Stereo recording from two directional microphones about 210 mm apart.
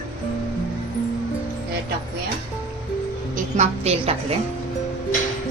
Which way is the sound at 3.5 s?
30° right (ahead or behind).